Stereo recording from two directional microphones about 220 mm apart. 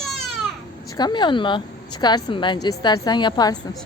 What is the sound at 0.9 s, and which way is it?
A woman's voice, 20° left (ahead or behind).